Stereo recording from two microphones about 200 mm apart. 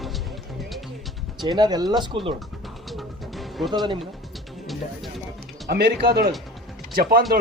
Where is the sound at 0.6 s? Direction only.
Centre (ahead or behind).